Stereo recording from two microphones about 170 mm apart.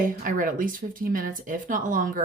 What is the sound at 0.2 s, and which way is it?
Speech, 55° right (ahead or behind).